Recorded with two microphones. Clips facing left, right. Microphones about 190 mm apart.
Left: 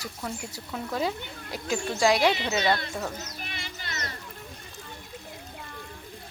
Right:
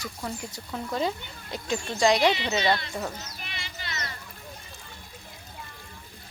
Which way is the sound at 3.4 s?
50° left (ahead or behind).